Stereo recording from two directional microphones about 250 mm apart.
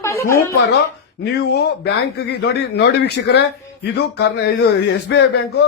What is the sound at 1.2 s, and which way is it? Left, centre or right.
A man's voice, left.